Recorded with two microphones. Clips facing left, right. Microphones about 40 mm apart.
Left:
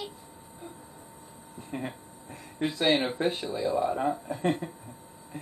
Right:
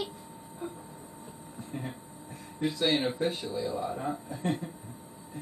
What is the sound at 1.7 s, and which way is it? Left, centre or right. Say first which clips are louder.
Speech: left 4 dB; left.